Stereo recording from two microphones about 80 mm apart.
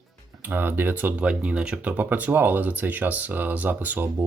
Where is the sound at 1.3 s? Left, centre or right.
Centre.